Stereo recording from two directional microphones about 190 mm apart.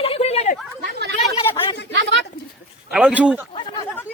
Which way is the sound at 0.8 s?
60° right (ahead or behind).